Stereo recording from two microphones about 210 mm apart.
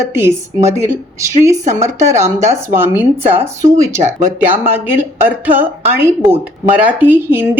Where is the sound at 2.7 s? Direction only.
10° right (ahead or behind).